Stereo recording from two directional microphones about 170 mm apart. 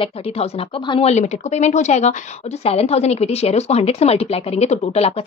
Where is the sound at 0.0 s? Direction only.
35° left (ahead or behind).